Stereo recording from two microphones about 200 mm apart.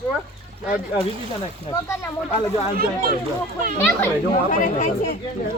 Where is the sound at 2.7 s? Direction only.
45° right (ahead or behind).